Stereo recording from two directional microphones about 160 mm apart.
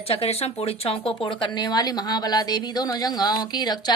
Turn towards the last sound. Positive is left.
turn(degrees=25)  # may be behind; listen again after turning